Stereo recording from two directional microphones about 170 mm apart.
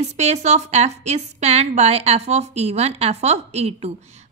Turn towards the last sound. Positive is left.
turn(degrees=-40)  # may be behind; listen again after turning